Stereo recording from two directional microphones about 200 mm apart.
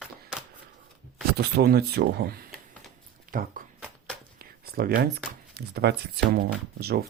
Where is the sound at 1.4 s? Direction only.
55° right (ahead or behind).